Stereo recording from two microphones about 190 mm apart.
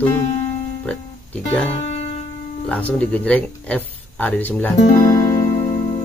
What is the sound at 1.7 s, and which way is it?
Music, 35° left (ahead or behind).